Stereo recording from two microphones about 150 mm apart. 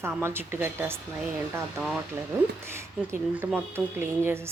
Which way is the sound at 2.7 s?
15° right (ahead or behind).